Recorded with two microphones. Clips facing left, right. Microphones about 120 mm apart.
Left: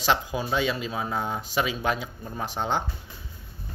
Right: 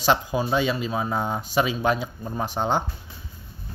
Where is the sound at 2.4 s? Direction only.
15° right (ahead or behind).